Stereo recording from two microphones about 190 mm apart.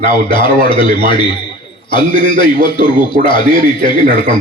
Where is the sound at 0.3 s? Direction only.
25° left (ahead or behind).